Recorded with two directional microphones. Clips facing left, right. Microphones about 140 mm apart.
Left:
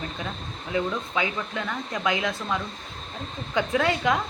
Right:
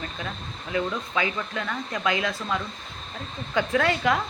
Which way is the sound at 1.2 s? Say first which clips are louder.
Right 2 dB; 20° left (ahead or behind).